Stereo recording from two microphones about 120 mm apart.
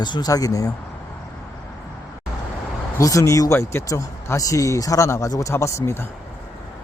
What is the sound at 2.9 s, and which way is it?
Speech, 25° left (ahead or behind).